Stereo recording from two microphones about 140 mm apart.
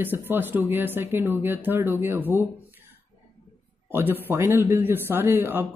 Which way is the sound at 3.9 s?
15° right (ahead or behind).